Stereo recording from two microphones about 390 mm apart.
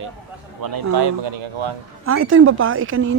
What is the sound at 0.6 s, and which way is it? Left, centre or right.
Speech, right.